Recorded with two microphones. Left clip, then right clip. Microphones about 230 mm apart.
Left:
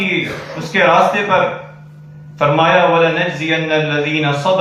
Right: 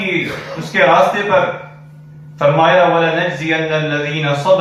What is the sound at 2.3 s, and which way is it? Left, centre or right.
A man's voice, left.